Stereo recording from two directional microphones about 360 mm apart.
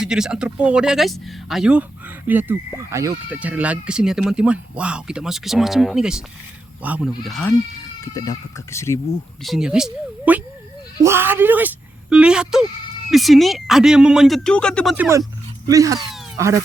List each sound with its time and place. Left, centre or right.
0.0 s speech: centre